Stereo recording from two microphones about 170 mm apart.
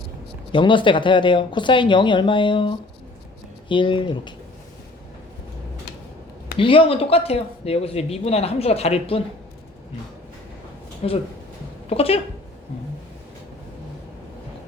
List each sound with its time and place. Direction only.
0.5 s speech: 30° left (ahead or behind)
6.6 s speech: 30° left (ahead or behind)
11.0 s speech: 40° left (ahead or behind)